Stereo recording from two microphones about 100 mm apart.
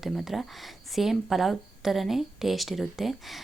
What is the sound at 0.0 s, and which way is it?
Speech, centre (ahead or behind).